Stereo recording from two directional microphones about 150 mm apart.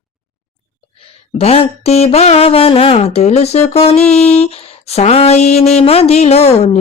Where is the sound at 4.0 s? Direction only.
5° left (ahead or behind).